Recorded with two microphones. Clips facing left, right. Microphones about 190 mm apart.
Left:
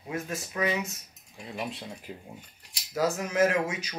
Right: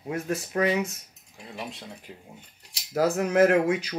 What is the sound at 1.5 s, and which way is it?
Speech, centre (ahead or behind).